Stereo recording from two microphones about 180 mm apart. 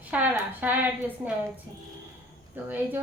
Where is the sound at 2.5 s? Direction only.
10° right (ahead or behind).